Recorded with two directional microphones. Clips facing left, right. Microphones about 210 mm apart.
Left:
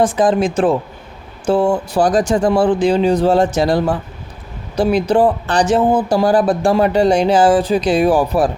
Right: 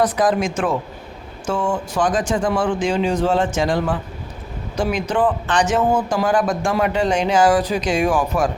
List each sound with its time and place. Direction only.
0.0 s speech: 30° left (ahead or behind)